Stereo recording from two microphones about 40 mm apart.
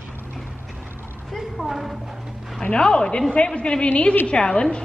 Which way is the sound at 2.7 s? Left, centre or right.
Left.